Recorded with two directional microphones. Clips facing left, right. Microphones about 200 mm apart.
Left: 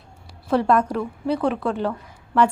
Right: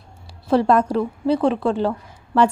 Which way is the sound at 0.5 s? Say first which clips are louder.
Right 3 dB; 30° right (ahead or behind).